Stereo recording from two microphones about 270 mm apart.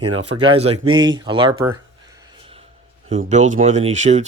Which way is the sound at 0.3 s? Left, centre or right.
Centre.